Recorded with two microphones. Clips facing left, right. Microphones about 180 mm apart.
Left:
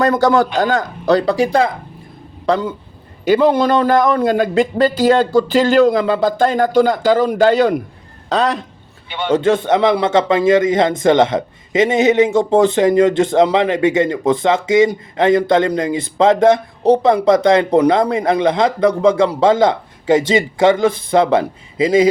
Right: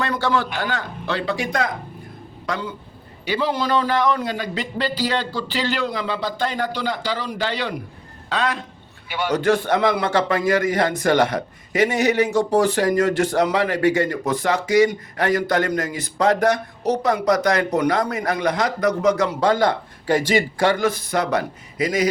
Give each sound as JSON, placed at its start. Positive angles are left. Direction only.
{"t": 0.0, "sound": "a man's voice", "side_deg": 40}
{"t": 2.5, "sound": "a man's voice", "side_deg": 45}
{"t": 9.0, "sound": "a man's voice", "side_deg": 25}